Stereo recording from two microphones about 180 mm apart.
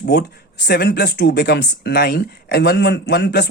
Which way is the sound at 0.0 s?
65° left (ahead or behind).